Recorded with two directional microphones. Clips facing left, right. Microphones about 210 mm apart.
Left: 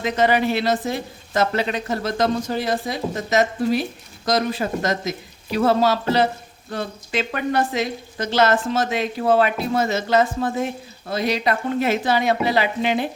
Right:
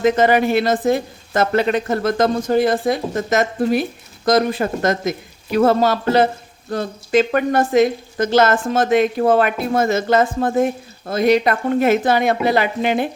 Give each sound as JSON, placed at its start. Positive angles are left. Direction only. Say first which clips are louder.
{"t": 0.0, "sound": "speech", "louder": "right 5 dB", "side_deg": -50}